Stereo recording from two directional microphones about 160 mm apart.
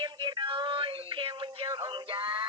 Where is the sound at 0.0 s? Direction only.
30° right (ahead or behind).